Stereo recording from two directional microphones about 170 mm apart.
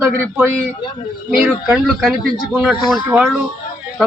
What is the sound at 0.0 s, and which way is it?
A man's voice, 10° right (ahead or behind).